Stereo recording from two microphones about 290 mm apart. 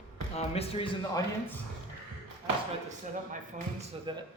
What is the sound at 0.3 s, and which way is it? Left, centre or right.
Speech, left.